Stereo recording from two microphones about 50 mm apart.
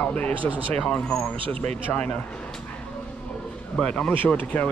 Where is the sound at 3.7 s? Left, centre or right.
Centre.